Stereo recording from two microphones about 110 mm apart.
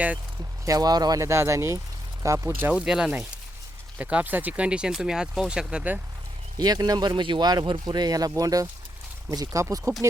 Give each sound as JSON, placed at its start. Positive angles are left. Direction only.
{"t": 0.6, "sound": "speech", "side_deg": -35}
{"t": 2.7, "sound": "speech", "side_deg": -5}
{"t": 6.6, "sound": "speech", "side_deg": -35}